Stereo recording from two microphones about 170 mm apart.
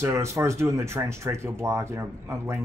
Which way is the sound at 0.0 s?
15° right (ahead or behind).